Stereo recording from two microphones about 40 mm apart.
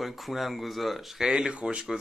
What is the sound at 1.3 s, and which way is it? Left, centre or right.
Speech, right.